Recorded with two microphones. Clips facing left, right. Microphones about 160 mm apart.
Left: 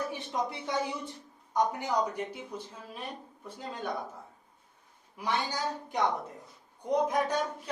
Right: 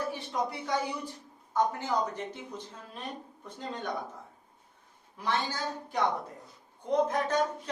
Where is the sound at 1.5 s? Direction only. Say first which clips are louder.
Even; 10° left (ahead or behind).